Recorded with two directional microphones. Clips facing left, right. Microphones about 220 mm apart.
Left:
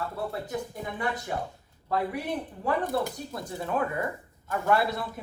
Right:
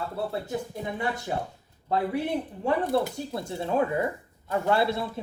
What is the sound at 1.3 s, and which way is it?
Speech, 30° right (ahead or behind).